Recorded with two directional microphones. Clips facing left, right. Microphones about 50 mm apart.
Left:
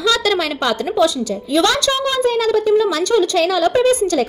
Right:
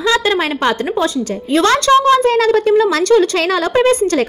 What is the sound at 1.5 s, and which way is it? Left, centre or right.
A woman's voice, right.